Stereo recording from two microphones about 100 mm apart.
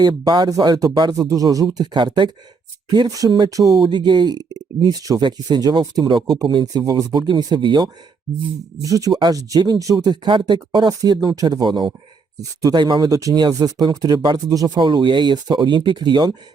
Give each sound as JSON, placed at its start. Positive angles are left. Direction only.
{"t": 0.0, "sound": "speech", "side_deg": -45}
{"t": 1.1, "sound": "speech", "side_deg": -35}
{"t": 3.1, "sound": "speech", "side_deg": -40}
{"t": 8.8, "sound": "speech", "side_deg": -35}
{"t": 14.8, "sound": "speech", "side_deg": -50}